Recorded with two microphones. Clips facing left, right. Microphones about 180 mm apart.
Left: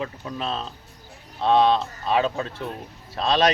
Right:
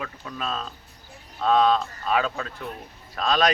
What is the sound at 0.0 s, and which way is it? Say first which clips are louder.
Speech: left 3 dB; 25° left (ahead or behind).